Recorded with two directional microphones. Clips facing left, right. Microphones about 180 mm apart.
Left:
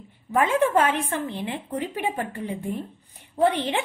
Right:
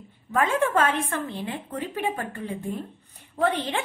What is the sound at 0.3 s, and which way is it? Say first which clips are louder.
A woman's voice: left 2 dB; 15° left (ahead or behind).